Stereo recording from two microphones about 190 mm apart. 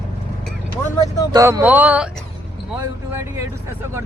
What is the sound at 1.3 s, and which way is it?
Speech, 15° right (ahead or behind).